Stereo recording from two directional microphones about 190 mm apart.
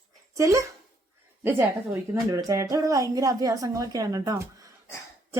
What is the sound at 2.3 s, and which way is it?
A woman's voice, 20° right (ahead or behind).